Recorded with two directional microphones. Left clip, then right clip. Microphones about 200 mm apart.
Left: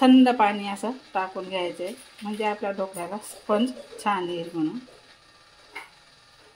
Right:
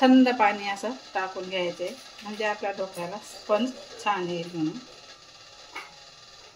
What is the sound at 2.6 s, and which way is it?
Speech, 35° left (ahead or behind).